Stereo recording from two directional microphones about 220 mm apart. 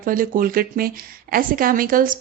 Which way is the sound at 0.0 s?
40° right (ahead or behind).